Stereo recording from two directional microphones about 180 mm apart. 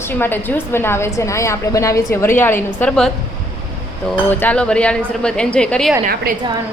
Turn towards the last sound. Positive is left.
turn(degrees=-55)  # may be behind; listen again after turning